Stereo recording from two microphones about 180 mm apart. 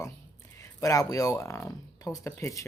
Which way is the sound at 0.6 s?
20° left (ahead or behind).